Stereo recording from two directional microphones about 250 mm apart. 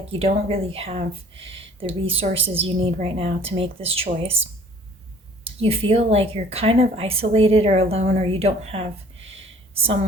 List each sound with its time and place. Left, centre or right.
0.1 s speech: right
5.5 s speech: right